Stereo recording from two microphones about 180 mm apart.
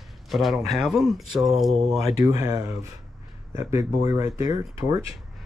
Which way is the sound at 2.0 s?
20° right (ahead or behind).